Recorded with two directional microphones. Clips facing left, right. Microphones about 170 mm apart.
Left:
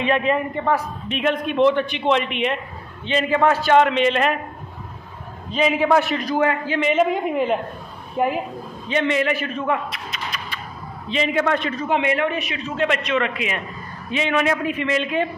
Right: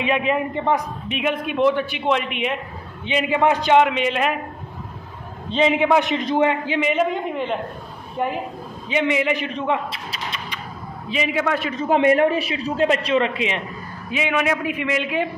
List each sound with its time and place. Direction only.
0.0 s a man's voice: 10° right (ahead or behind)
5.5 s a man's voice: 25° right (ahead or behind)
6.9 s a woman's voice: 5° left (ahead or behind)
8.8 s a man's voice: 10° right (ahead or behind)
11.1 s a man's voice: 5° right (ahead or behind)
11.8 s a man's voice: 40° right (ahead or behind)
12.3 s a man's voice: 30° right (ahead or behind)
14.1 s a man's voice: 10° right (ahead or behind)